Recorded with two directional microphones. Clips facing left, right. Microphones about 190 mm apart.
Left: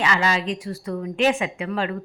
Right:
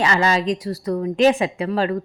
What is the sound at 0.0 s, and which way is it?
A woman's voice, 40° right (ahead or behind).